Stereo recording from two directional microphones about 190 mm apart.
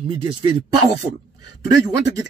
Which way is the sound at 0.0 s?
30° right (ahead or behind).